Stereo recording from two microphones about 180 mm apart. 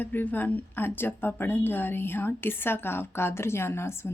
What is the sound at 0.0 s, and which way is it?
A woman's voice, 10° left (ahead or behind).